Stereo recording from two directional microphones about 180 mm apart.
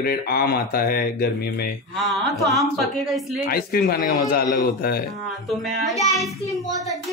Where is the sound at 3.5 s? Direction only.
55° left (ahead or behind).